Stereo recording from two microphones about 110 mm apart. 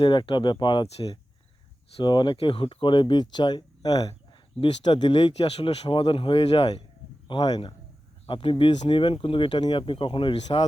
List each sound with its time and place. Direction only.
0.0 s speech: 45° left (ahead or behind)
4.6 s speech: 45° left (ahead or behind)
7.3 s speech: 40° left (ahead or behind)
8.3 s speech: 50° left (ahead or behind)